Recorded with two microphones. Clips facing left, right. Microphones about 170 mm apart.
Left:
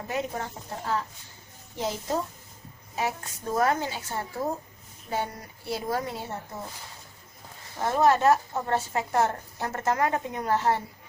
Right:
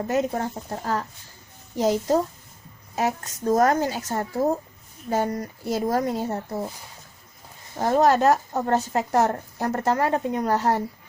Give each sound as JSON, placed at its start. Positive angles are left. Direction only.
{"t": 0.1, "sound": "speech", "side_deg": -40}
{"t": 7.8, "sound": "speech", "side_deg": -35}